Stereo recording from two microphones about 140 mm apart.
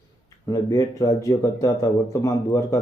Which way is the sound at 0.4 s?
25° left (ahead or behind).